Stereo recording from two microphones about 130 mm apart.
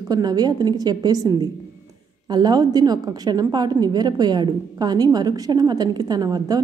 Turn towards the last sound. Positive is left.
turn(degrees=-30)  # may be behind; listen again after turning